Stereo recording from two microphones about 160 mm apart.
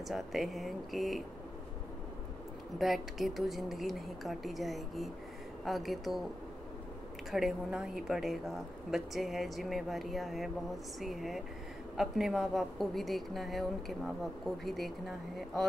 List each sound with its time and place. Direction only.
0.1 s a woman's voice: centre (ahead or behind)
2.8 s a woman's voice: centre (ahead or behind)
7.2 s a woman's voice: centre (ahead or behind)